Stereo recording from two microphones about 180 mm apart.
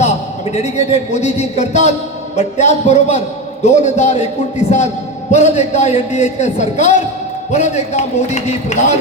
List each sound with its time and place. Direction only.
0.5 s a man's voice: 40° left (ahead or behind)